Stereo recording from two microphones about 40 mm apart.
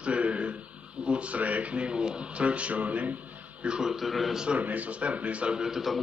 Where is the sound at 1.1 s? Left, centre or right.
Right.